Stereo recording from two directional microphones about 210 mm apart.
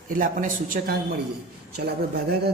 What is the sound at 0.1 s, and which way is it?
A man's voice, 40° right (ahead or behind).